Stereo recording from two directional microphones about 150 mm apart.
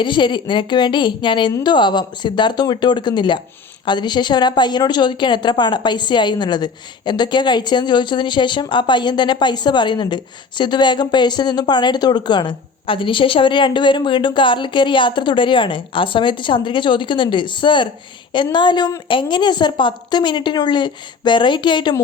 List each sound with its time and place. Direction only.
0.0 s speech: 30° left (ahead or behind)